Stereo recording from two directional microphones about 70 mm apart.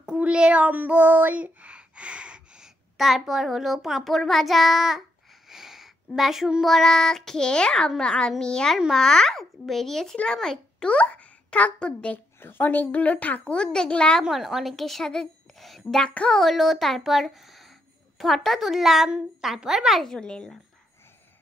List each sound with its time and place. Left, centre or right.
0.0 s child singing: centre
5.5 s speech: centre
8.7 s a child's voice: centre
9.0 s a child's voice: centre
12.4 s a woman's voice: left; by 14.2 s centre
14.2 s a child's voice: centre
20.1 s speech: centre